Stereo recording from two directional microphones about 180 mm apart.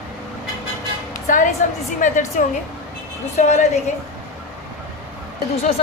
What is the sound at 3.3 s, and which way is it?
Speech, 40° left (ahead or behind).